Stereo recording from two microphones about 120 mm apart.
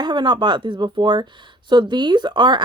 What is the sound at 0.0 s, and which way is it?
A woman's voice, 35° right (ahead or behind).